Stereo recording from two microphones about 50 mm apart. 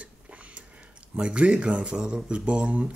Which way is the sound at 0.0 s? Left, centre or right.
Right.